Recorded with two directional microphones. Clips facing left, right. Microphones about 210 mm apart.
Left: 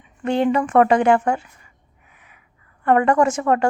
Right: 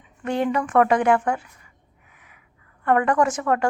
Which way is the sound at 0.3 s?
25° left (ahead or behind).